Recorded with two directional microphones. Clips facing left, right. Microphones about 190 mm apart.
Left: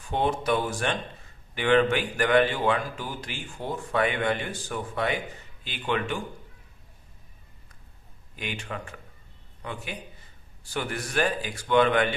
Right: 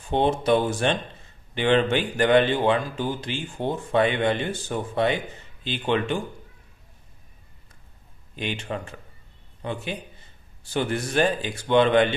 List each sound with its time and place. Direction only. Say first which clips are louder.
0.1 s a man's voice: right 5 dB; 25° right (ahead or behind)
8.4 s a man's voice: right 5 dB; 30° right (ahead or behind)